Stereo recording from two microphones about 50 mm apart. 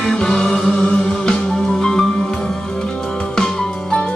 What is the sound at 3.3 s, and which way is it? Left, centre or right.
Music, centre.